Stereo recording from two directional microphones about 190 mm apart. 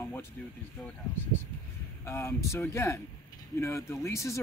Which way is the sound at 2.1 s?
15° left (ahead or behind).